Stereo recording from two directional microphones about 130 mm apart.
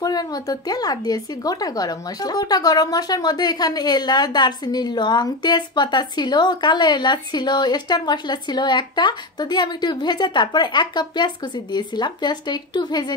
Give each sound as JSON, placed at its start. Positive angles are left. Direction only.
{"t": 0.0, "sound": "speech", "side_deg": 30}